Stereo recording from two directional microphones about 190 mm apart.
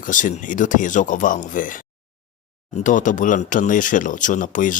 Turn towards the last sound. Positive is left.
turn(degrees=45)  # may be behind; listen again after turning